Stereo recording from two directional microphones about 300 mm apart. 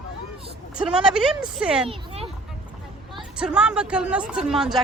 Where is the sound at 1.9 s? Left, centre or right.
Centre.